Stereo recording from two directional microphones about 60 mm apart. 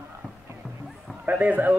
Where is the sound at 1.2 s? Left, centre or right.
Right.